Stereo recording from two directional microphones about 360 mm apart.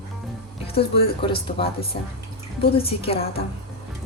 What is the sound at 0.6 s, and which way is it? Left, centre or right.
A woman's voice, centre.